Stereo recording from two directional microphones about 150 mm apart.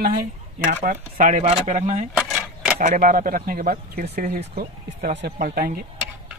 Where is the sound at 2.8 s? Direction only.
65° right (ahead or behind).